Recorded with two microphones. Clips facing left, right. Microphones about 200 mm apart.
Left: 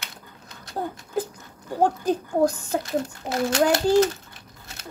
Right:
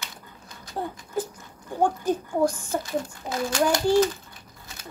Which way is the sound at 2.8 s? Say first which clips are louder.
Left 3 dB; 65° left (ahead or behind).